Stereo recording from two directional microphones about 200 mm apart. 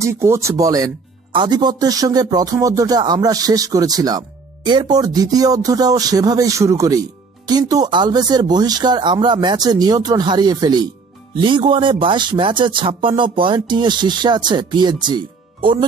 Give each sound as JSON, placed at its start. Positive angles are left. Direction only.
{"t": 0.0, "sound": "speech", "side_deg": -15}